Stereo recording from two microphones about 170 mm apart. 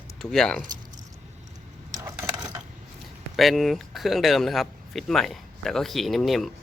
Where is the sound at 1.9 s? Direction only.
20° right (ahead or behind).